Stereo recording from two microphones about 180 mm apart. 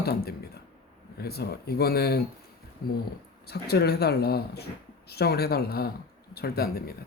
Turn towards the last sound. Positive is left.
turn(degrees=60)  # may be behind; listen again after turning